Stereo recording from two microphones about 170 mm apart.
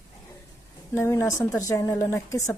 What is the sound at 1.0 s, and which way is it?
A woman's voice, 15° left (ahead or behind).